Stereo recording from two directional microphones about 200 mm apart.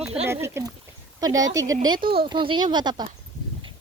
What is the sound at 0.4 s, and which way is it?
Speech, 15° right (ahead or behind).